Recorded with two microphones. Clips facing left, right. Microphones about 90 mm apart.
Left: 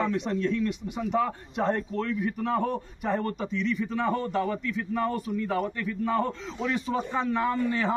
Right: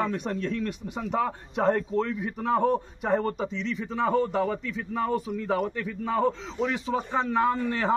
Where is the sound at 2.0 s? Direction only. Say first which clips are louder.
Right 1 dB; 25° right (ahead or behind).